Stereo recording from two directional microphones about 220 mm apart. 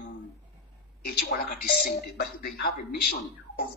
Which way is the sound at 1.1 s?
45° left (ahead or behind).